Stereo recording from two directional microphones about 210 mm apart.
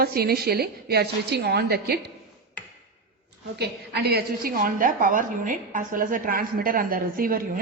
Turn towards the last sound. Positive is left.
turn(degrees=-45)  # may be behind; listen again after turning